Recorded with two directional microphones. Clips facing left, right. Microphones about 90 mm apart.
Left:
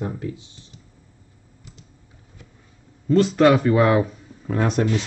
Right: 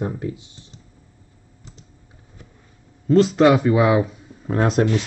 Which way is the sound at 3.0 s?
25° right (ahead or behind).